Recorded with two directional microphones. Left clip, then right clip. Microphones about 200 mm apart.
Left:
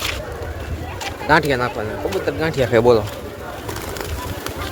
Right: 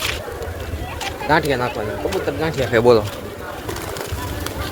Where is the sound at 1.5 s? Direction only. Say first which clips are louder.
Even; 15° left (ahead or behind).